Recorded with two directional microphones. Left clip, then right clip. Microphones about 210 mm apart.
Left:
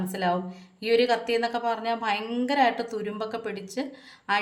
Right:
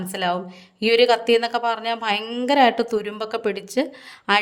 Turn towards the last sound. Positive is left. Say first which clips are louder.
# right 7 dB
turn(degrees=-50)  # may be behind; listen again after turning